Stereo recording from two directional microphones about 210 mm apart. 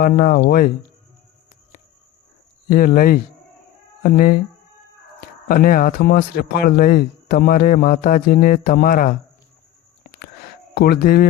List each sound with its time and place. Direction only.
0.0 s speech: 45° left (ahead or behind)
2.6 s speech: 40° left (ahead or behind)
5.5 s speech: 40° left (ahead or behind)
10.8 s speech: 45° left (ahead or behind)